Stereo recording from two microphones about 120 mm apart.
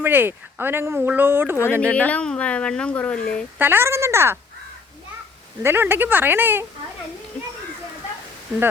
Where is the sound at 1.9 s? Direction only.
10° left (ahead or behind).